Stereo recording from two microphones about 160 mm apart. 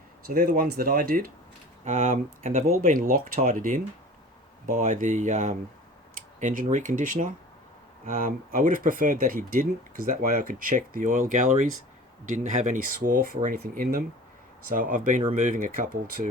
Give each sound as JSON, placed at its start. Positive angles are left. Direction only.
{"t": 0.3, "sound": "speech", "side_deg": -65}